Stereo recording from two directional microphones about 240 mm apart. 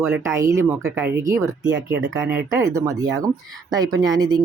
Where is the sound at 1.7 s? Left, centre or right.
Right.